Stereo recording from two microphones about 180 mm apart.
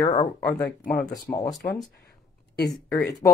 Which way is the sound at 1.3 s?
20° left (ahead or behind).